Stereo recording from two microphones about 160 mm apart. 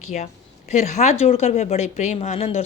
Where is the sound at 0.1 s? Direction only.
50° left (ahead or behind).